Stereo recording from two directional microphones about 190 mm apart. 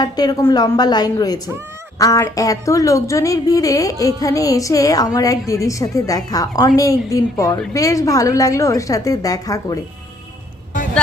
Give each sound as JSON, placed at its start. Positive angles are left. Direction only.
{"t": 0.0, "sound": "a woman's voice", "side_deg": 20}